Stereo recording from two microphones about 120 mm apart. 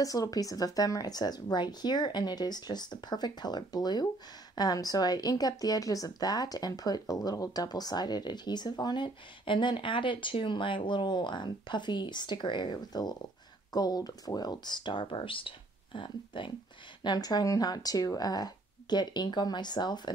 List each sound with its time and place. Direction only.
0.0 s speech: 30° left (ahead or behind)